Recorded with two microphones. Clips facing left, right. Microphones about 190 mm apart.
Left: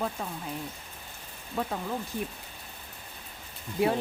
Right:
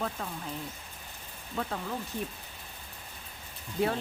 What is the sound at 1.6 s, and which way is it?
Speech, 10° left (ahead or behind).